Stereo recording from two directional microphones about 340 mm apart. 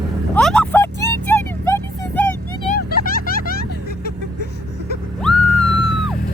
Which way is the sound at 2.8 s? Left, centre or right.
Left.